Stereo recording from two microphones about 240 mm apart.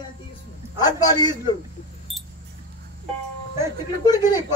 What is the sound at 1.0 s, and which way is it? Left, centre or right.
Speech, centre.